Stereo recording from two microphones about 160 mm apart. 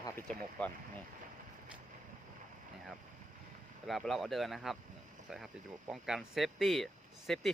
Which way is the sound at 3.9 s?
Centre (ahead or behind).